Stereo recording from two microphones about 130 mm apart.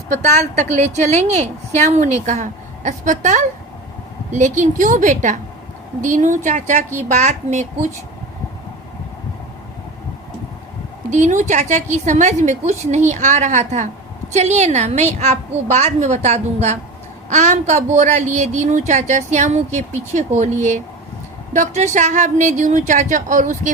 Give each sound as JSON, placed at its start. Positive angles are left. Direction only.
{"t": 0.1, "sound": "a woman's voice", "side_deg": -70}
{"t": 11.1, "sound": "a woman's voice", "side_deg": -70}
{"t": 21.9, "sound": "a woman's voice", "side_deg": -70}